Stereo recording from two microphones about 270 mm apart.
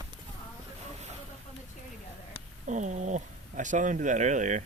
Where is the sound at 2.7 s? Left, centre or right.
Right.